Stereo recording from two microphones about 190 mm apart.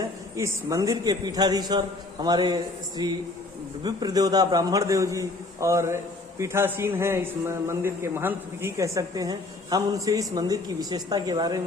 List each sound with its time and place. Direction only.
0.0 s a man's voice: 15° right (ahead or behind)